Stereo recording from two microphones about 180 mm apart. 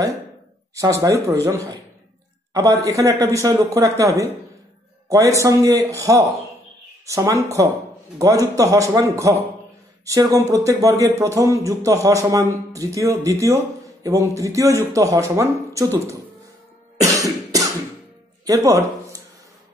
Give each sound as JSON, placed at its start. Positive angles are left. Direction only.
{"t": 0.7, "sound": "speech", "side_deg": -20}
{"t": 17.0, "sound": "music", "side_deg": -20}
{"t": 18.4, "sound": "a sound", "side_deg": -20}